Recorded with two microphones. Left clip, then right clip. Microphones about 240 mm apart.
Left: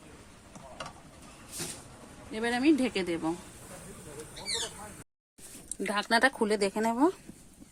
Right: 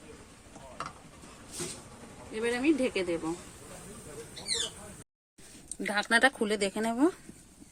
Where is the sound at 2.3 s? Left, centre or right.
Left.